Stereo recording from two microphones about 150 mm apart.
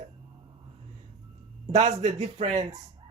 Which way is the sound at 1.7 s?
50° right (ahead or behind).